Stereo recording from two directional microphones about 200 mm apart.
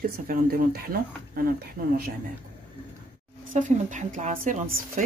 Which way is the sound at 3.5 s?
40° right (ahead or behind).